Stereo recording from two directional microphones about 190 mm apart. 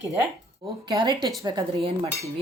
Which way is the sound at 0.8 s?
25° right (ahead or behind).